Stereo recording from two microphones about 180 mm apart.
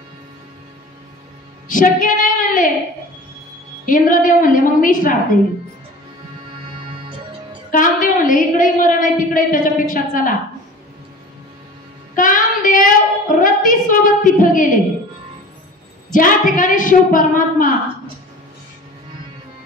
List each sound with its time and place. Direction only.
1.7 s a woman's voice: 45° left (ahead or behind)
3.8 s a woman's voice: 50° left (ahead or behind)
7.7 s a woman's voice: 50° left (ahead or behind)
12.2 s a sound: 45° left (ahead or behind)
16.1 s a woman's voice: 45° left (ahead or behind)